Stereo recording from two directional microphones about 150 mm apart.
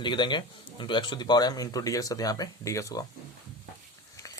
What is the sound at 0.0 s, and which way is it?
Speech, 30° left (ahead or behind).